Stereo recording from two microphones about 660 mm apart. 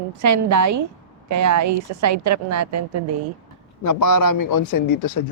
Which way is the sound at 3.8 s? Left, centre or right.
Left.